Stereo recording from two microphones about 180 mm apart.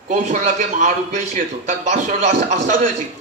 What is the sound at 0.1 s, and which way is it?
A man's voice, 45° right (ahead or behind).